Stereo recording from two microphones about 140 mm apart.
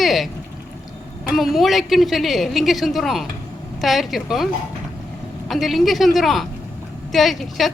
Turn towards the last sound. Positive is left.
turn(degrees=0)  # may be behind; listen again after turning